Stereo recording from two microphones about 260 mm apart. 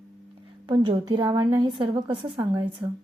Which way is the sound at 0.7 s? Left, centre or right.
Centre.